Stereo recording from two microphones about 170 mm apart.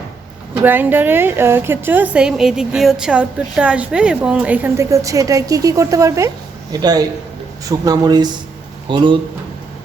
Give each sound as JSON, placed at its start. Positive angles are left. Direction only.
{"t": 0.6, "sound": "a woman's voice", "side_deg": -10}